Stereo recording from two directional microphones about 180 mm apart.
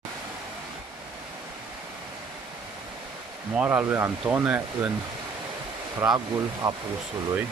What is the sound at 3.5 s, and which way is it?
Speech, 10° right (ahead or behind).